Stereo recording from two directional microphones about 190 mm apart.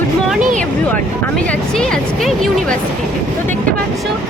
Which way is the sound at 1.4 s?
5° left (ahead or behind).